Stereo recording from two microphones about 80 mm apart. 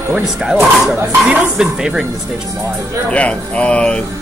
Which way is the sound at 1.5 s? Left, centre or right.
Centre.